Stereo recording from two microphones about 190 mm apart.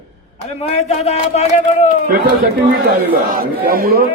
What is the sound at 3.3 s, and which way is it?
Speech, 50° right (ahead or behind).